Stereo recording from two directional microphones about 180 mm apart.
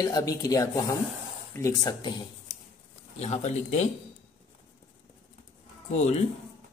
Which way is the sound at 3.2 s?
40° left (ahead or behind).